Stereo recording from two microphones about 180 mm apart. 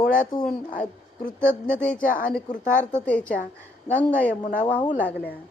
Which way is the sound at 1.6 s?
5° left (ahead or behind).